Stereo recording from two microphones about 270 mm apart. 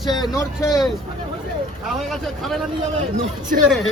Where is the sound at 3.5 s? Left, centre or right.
Right.